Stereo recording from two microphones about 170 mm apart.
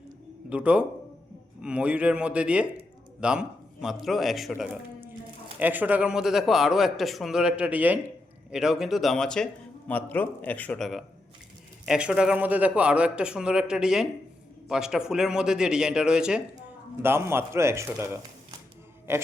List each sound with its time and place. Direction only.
0.5 s a man's voice: 5° right (ahead or behind)